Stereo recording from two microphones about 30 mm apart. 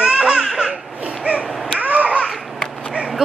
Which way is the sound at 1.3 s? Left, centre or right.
Right.